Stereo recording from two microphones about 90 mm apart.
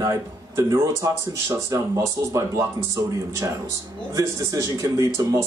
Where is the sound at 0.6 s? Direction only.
40° right (ahead or behind).